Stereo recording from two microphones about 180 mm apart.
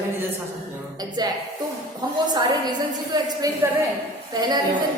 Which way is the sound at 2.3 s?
25° right (ahead or behind).